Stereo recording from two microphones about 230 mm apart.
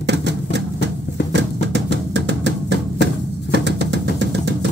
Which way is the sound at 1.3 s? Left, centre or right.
Right.